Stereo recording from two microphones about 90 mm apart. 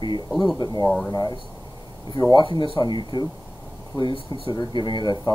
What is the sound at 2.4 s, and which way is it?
Speech, 70° left (ahead or behind).